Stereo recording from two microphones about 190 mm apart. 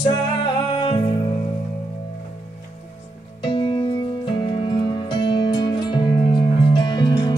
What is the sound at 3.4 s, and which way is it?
Music, 25° left (ahead or behind).